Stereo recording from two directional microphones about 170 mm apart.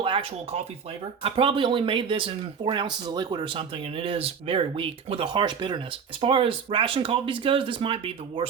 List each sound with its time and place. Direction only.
0.0 s speech: 30° right (ahead or behind)